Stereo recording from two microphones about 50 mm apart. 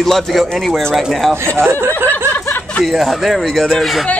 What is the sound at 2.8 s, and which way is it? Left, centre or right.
A man's voice, centre.